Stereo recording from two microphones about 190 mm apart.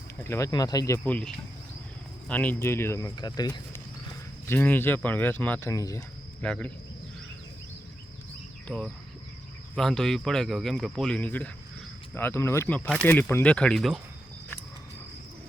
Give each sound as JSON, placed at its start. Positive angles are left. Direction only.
{"t": 0.2, "sound": "speech", "side_deg": 15}
{"t": 4.4, "sound": "speech", "side_deg": 10}
{"t": 6.4, "sound": "speech", "side_deg": 5}
{"t": 8.6, "sound": "speech", "side_deg": 5}